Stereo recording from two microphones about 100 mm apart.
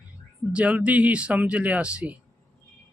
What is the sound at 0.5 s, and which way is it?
Speech, 10° right (ahead or behind).